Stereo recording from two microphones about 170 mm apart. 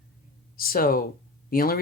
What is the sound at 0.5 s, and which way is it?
Speech, 60° left (ahead or behind).